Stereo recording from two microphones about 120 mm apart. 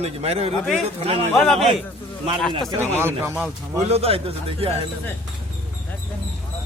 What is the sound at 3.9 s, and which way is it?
Speech, 60° right (ahead or behind).